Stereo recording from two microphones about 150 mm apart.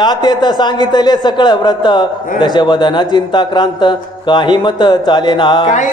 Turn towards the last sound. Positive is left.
turn(degrees=30)  # may be behind; listen again after turning